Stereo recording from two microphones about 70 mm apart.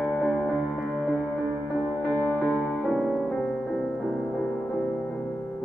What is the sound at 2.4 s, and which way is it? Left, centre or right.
Music, centre.